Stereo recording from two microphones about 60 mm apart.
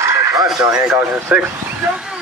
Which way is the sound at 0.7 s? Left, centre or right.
Centre.